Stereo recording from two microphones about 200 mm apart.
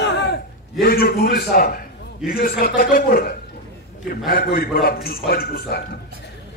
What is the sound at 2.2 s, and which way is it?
A man's voice, 45° left (ahead or behind).